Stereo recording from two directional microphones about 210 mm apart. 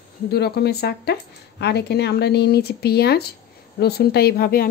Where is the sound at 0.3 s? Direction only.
50° left (ahead or behind).